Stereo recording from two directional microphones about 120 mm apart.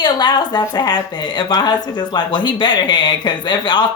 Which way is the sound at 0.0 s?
35° left (ahead or behind).